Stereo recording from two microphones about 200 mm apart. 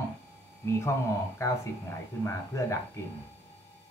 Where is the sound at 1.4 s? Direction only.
15° left (ahead or behind).